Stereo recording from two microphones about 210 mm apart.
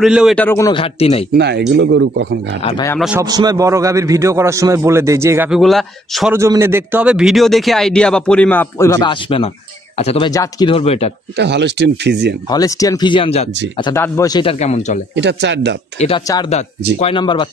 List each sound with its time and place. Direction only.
0.0 s speech: 5° right (ahead or behind)
0.7 s speech: 25° left (ahead or behind)
1.3 s speech: 55° right (ahead or behind)
3.2 s a man's voice: 20° right (ahead or behind)
5.6 s speech: centre (ahead or behind)
6.3 s speech: 15° right (ahead or behind); by 10.3 s 30° left (ahead or behind)
10.3 s speech: 20° left (ahead or behind)
11.3 s speech: 55° right (ahead or behind)
12.4 s speech: 15° left (ahead or behind); by 15.0 s 35° left (ahead or behind)
15.1 s speech: 55° right (ahead or behind)
16.4 s speech: 30° left (ahead or behind)